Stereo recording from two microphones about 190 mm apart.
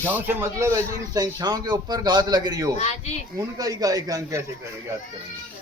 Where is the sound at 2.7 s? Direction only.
35° left (ahead or behind).